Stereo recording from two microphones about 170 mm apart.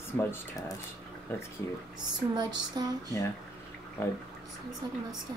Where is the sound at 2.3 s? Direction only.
25° right (ahead or behind).